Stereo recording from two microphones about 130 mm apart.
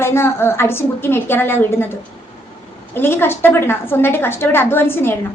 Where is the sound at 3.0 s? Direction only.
15° left (ahead or behind).